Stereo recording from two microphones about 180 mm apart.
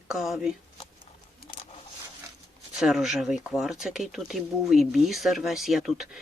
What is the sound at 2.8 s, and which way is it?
Speech, centre (ahead or behind).